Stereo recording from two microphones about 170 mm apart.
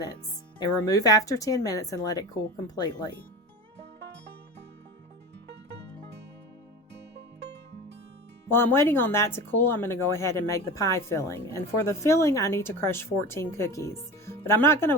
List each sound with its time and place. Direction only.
0.9 s speech: 20° left (ahead or behind)
8.4 s speech: 15° left (ahead or behind)